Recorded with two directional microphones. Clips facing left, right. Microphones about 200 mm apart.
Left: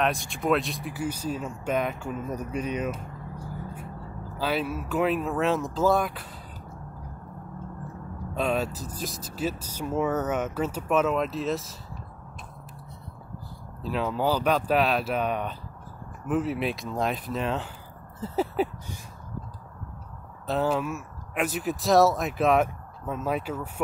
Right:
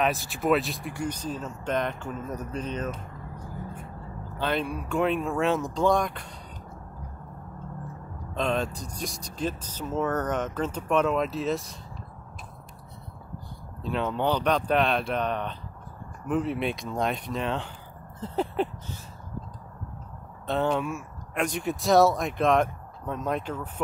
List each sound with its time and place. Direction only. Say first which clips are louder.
0.0 s speech: even; 5° right (ahead or behind)
8.4 s speech: left 1 dB; 5° left (ahead or behind)
13.8 s speech: even; 5° left (ahead or behind)
18.2 s a sound: left 1 dB; 5° left (ahead or behind)
20.4 s speech: even; 5° left (ahead or behind)